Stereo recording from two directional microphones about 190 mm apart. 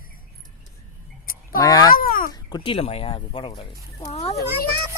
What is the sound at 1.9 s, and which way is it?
Speech, 50° left (ahead or behind).